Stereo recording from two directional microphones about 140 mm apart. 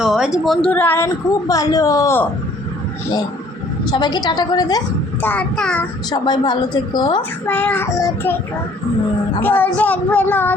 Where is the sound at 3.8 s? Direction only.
30° left (ahead or behind).